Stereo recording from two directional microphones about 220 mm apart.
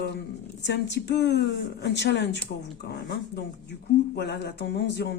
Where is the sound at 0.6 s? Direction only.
50° left (ahead or behind).